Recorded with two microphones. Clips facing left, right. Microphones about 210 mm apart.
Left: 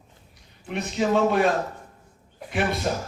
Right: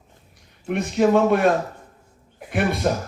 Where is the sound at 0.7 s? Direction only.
55° right (ahead or behind).